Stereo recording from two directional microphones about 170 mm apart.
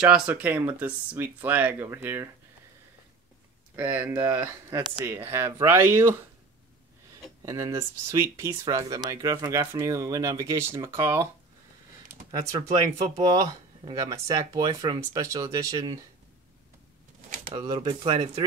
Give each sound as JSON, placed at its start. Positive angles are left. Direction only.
{"t": 0.0, "sound": "speech", "side_deg": -10}
{"t": 3.7, "sound": "speech", "side_deg": -10}
{"t": 7.4, "sound": "speech", "side_deg": -20}
{"t": 13.4, "sound": "speech", "side_deg": -25}
{"t": 17.6, "sound": "speech", "side_deg": -25}